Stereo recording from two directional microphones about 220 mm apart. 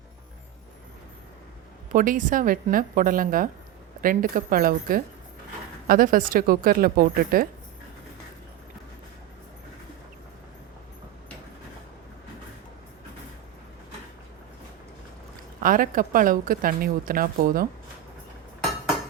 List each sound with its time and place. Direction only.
1.9 s speech: 35° right (ahead or behind)
15.6 s speech: 40° right (ahead or behind)